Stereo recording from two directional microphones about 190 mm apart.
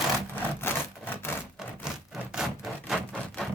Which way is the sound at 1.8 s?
5° right (ahead or behind).